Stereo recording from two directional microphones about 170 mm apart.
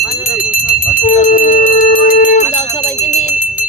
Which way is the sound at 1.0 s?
50° left (ahead or behind).